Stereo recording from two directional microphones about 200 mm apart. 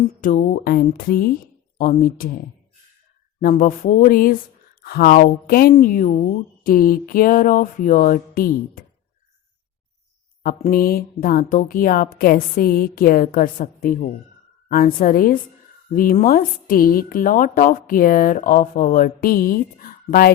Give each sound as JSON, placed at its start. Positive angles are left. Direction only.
{"t": 0.2, "sound": "a woman's voice", "side_deg": 40}
{"t": 3.4, "sound": "a woman's voice", "side_deg": 40}
{"t": 10.4, "sound": "a woman's voice", "side_deg": 45}